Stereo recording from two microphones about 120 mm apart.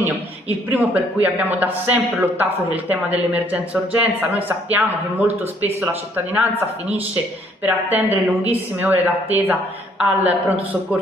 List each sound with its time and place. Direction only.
0.7 s a man's voice: 15° right (ahead or behind)
7.6 s a man's voice: 15° right (ahead or behind)